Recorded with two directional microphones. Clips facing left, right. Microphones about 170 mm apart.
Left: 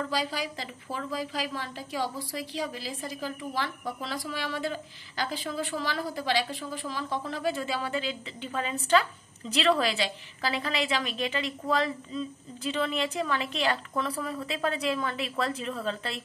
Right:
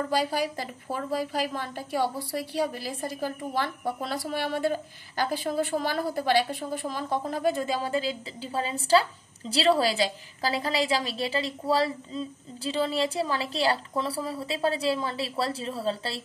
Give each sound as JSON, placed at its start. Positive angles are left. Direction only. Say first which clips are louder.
{"t": 0.1, "sound": "a woman's voice", "louder": "right 5 dB", "side_deg": -50}